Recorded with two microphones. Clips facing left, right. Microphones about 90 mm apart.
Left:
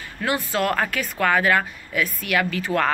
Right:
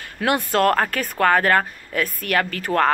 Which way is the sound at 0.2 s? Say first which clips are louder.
Right 4 dB; 60° right (ahead or behind).